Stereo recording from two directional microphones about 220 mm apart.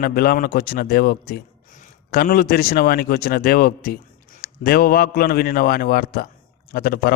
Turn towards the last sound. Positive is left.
turn(degrees=45)  # may be behind; listen again after turning